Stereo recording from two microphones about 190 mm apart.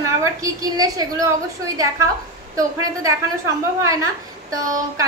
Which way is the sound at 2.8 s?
15° right (ahead or behind).